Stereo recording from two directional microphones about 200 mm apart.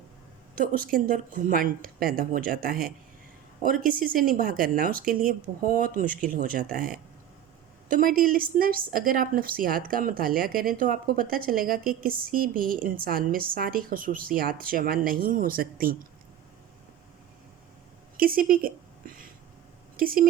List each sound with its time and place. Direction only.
0.5 s a woman's voice: 45° right (ahead or behind)
18.2 s a sound: 45° right (ahead or behind)
20.0 s a woman's voice: 45° right (ahead or behind)